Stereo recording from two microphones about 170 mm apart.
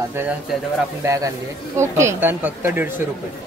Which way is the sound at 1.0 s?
20° right (ahead or behind).